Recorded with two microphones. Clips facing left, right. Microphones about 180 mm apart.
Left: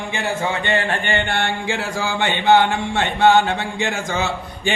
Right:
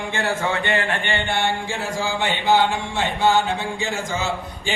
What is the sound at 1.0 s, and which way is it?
Mantra, 55° left (ahead or behind).